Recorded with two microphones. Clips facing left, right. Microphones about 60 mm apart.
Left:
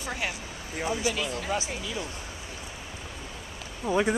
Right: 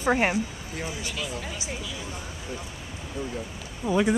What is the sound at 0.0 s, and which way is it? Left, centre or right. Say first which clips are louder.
Speech: right 10 dB; right.